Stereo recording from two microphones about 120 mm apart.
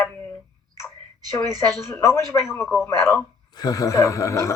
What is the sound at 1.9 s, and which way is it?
Speech, 25° left (ahead or behind).